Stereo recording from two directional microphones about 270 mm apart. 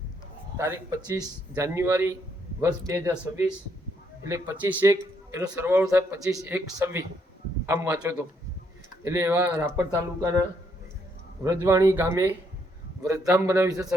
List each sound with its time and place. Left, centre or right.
0.5 s a man's voice: centre
11.4 s a man's voice: centre